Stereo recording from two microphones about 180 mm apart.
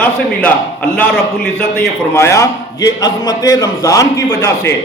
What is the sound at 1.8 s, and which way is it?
A man's voice, 15° left (ahead or behind).